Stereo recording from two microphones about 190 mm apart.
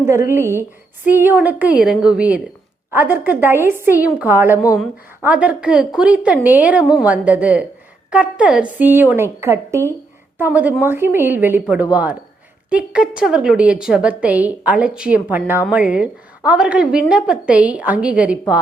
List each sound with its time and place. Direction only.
0.0 s a woman's voice: 15° right (ahead or behind)
12.7 s a woman's voice: 5° right (ahead or behind)